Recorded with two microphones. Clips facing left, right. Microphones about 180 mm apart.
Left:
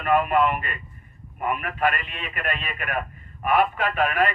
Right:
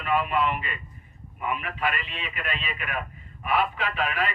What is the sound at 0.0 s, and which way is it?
Speech, 50° left (ahead or behind).